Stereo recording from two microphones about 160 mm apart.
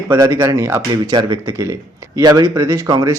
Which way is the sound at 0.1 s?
15° right (ahead or behind).